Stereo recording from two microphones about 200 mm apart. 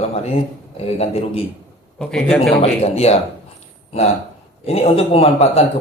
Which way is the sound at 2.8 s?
30° left (ahead or behind).